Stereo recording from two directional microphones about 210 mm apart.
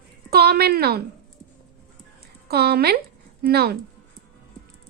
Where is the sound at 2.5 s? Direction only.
50° right (ahead or behind).